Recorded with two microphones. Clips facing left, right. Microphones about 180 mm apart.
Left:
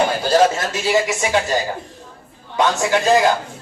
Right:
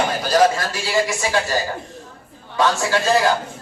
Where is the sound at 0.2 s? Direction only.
25° left (ahead or behind).